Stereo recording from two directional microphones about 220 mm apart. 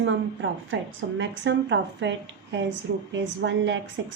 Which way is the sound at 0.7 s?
60° right (ahead or behind).